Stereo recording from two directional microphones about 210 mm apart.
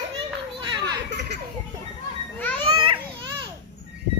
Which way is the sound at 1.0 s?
55° right (ahead or behind).